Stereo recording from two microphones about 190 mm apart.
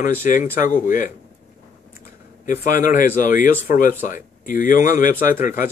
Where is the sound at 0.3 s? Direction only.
45° left (ahead or behind).